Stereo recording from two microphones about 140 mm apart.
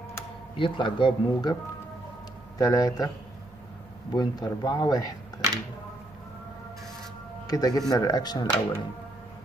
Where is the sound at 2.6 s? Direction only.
25° left (ahead or behind).